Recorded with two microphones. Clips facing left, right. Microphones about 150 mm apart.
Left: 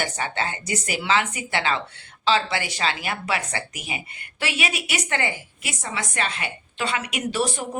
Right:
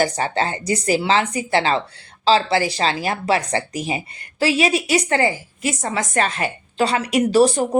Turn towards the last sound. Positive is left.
turn(degrees=-40)  # may be behind; listen again after turning